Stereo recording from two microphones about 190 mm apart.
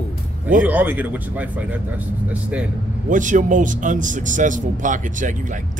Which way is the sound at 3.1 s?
40° right (ahead or behind).